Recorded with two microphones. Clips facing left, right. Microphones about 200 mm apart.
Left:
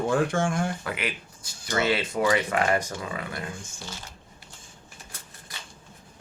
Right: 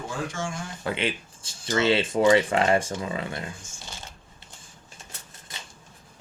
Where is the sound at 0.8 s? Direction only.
25° right (ahead or behind).